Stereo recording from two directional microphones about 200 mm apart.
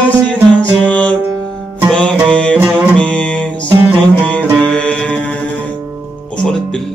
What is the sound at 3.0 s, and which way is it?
Music, 5° left (ahead or behind).